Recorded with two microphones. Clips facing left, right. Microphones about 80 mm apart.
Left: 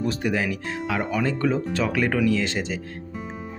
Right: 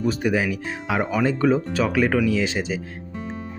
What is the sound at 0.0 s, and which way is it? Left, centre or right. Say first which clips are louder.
Speech: right 3 dB; centre.